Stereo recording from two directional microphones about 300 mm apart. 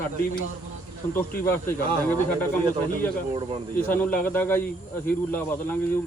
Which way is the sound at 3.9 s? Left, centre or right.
Centre.